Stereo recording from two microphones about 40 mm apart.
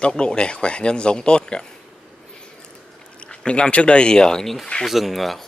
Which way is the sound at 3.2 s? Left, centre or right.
Left.